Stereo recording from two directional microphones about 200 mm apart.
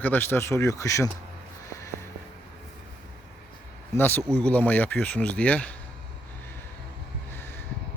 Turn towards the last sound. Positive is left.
turn(degrees=10)  # may be behind; listen again after turning